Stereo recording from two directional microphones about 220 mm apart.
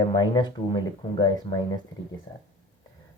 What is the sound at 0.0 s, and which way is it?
Speech, 20° left (ahead or behind).